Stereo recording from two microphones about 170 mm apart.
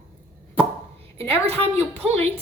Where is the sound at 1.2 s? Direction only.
35° right (ahead or behind).